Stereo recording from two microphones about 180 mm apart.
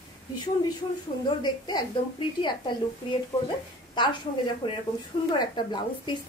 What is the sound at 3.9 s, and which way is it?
Speech, 25° left (ahead or behind).